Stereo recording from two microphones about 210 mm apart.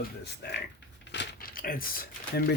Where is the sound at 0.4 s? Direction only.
50° left (ahead or behind).